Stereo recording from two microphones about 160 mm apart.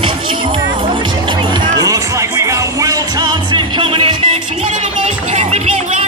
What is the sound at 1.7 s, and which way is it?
Music, 20° right (ahead or behind).